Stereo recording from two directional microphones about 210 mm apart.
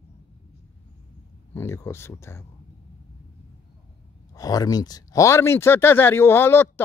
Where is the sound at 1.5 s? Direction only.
10° left (ahead or behind).